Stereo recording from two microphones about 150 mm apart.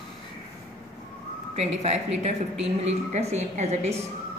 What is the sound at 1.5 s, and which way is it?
A woman's voice, 45° right (ahead or behind).